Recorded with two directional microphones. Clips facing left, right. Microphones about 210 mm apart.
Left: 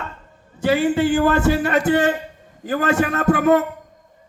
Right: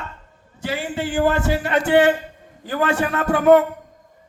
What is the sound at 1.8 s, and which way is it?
A man's voice, 40° left (ahead or behind).